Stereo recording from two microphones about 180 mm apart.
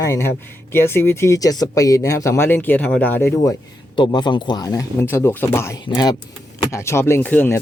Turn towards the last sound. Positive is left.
turn(degrees=10)  # may be behind; listen again after turning